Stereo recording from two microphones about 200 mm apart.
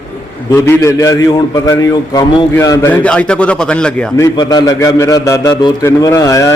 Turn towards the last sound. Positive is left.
turn(degrees=15)  # may be behind; listen again after turning